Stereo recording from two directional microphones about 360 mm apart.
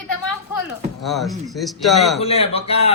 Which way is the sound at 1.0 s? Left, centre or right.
Centre.